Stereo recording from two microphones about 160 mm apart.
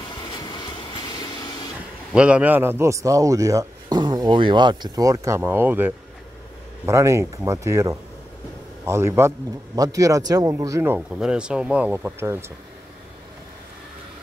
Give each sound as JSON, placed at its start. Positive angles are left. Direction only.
{"t": 0.3, "sound": "train", "side_deg": 25}
{"t": 2.1, "sound": "speech", "side_deg": -5}
{"t": 11.0, "sound": "speech", "side_deg": -5}